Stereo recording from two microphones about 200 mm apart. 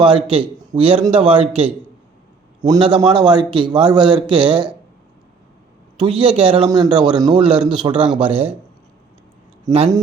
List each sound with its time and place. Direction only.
0.0 s speech: 25° right (ahead or behind)
6.0 s speech: 25° right (ahead or behind)